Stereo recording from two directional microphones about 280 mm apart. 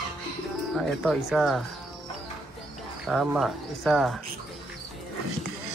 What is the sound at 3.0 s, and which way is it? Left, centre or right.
Speech, centre.